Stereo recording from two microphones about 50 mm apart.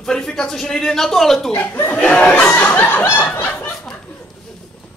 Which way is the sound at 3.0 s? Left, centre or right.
Left.